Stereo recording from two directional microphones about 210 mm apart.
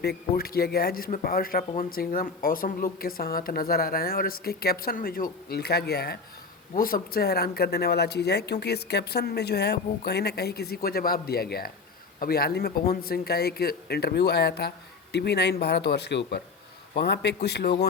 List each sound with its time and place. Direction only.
0.0 s speech: 50° left (ahead or behind)